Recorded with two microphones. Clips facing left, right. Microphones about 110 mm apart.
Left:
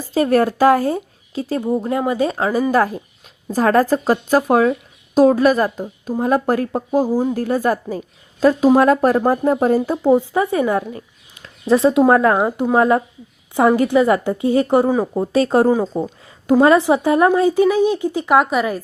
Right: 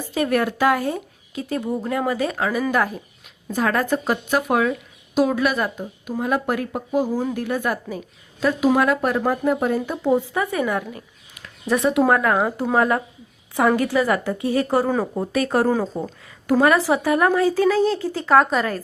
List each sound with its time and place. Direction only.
0.1 s a woman's voice: 35° left (ahead or behind)
12.4 s a woman's voice: 15° left (ahead or behind)